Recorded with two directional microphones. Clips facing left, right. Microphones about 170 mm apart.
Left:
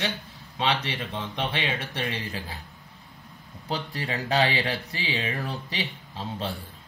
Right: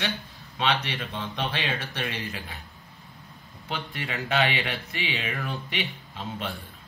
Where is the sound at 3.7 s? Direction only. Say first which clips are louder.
Left 3 dB; 35° left (ahead or behind).